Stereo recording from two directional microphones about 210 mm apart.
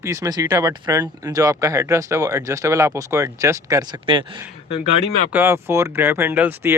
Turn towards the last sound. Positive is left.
turn(degrees=-10)  # may be behind; listen again after turning